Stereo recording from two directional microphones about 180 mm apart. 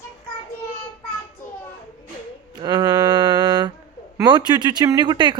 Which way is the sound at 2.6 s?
25° right (ahead or behind).